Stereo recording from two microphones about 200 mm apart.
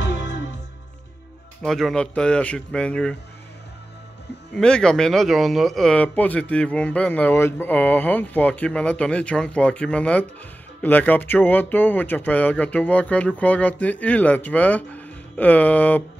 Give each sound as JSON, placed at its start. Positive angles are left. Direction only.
{"t": 0.0, "sound": "music", "side_deg": 65}
{"t": 1.6, "sound": "a man's voice", "side_deg": 0}
{"t": 4.6, "sound": "a man's voice", "side_deg": 5}